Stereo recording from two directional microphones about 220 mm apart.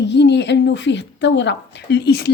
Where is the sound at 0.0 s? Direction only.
50° left (ahead or behind).